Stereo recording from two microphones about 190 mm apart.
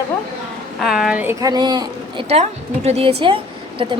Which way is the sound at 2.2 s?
35° right (ahead or behind).